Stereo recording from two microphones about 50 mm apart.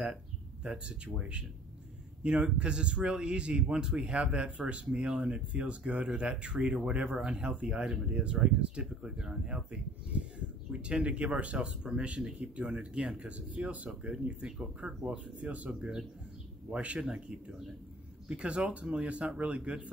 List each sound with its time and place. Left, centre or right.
0.7 s a man's voice: right
17.1 s a man's voice: centre